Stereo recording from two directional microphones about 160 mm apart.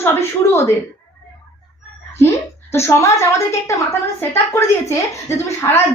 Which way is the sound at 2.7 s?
15° left (ahead or behind).